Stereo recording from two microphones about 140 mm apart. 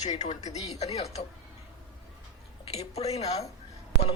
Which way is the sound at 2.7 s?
50° left (ahead or behind).